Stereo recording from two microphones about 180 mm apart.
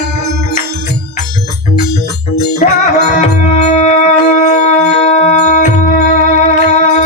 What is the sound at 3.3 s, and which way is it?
Music, 40° left (ahead or behind).